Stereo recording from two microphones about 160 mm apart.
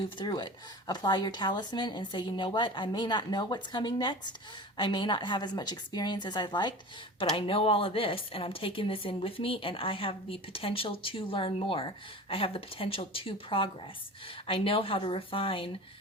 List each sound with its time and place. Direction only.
0.0 s a woman's voice: 30° left (ahead or behind)